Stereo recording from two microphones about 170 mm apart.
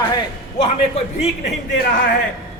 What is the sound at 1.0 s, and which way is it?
Speech, 35° left (ahead or behind).